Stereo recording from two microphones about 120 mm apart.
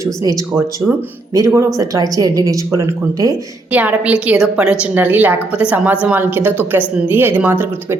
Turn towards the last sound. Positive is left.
turn(degrees=-15)  # may be behind; listen again after turning